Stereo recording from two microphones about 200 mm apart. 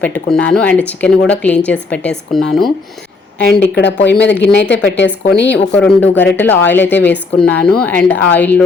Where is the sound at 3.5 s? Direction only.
60° left (ahead or behind).